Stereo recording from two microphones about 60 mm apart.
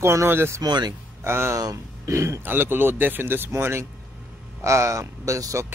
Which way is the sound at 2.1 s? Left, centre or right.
Right.